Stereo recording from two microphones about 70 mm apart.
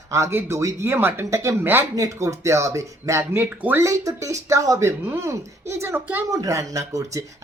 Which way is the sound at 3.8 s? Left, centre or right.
Right.